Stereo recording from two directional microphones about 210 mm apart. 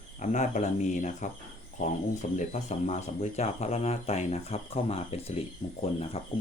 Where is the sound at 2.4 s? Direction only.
35° left (ahead or behind).